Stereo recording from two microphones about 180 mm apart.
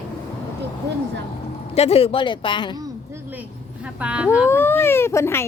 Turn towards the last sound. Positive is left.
turn(degrees=15)  # may be behind; listen again after turning